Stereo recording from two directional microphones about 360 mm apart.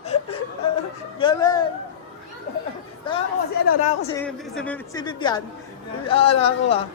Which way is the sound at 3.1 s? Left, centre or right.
Centre.